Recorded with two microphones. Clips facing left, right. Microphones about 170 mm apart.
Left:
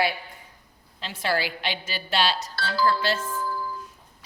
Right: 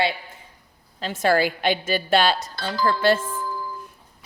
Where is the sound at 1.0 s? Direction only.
45° right (ahead or behind).